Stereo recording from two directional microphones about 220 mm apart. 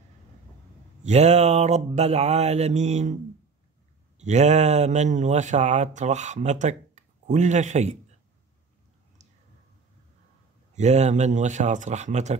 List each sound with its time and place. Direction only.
1.0 s mantra: 30° right (ahead or behind)
4.2 s speech: 30° right (ahead or behind)
10.7 s speech: 30° right (ahead or behind)